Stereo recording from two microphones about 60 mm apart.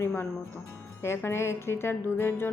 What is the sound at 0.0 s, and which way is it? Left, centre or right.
A woman's voice, left.